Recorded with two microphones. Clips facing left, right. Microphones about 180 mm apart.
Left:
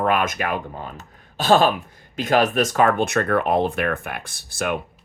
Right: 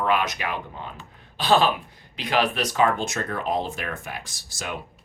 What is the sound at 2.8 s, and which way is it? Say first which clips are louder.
Speech: left 2 dB; 60° left (ahead or behind).